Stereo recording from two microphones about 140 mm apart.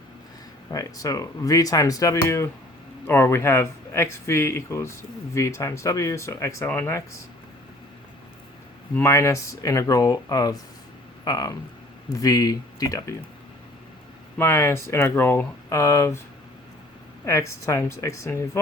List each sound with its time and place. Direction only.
0.7 s speech: 25° left (ahead or behind)
9.0 s speech: 20° left (ahead or behind)
14.3 s speech: 15° left (ahead or behind)
17.2 s speech: 20° left (ahead or behind)